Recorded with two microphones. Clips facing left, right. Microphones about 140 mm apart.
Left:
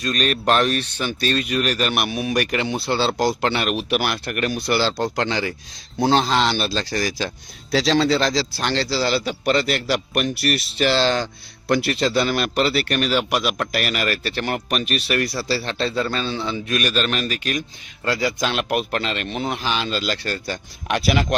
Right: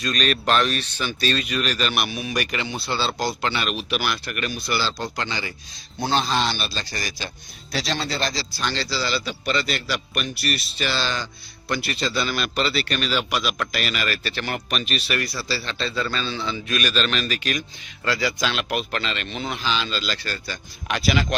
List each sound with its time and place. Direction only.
0.0 s a man's voice: 45° left (ahead or behind); by 5.5 s 70° left (ahead or behind)
6.0 s a man's voice: 85° left; by 21.3 s 55° left (ahead or behind)